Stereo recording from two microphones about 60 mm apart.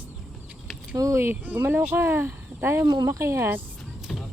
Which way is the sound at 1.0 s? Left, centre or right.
Right.